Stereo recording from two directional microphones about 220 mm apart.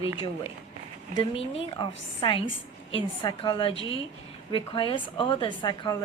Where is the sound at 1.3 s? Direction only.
25° left (ahead or behind).